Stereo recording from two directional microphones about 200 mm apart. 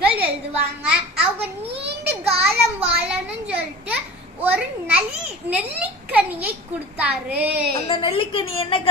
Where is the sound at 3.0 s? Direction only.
5° right (ahead or behind).